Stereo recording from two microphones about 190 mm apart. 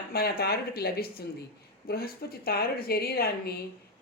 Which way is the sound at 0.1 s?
55° left (ahead or behind).